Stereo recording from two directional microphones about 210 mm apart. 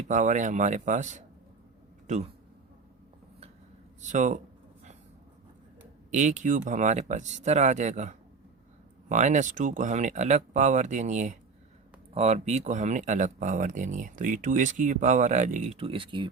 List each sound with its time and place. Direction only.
0.1 s a man's voice: 35° right (ahead or behind)
4.0 s speech: 35° right (ahead or behind)
6.1 s speech: 35° right (ahead or behind)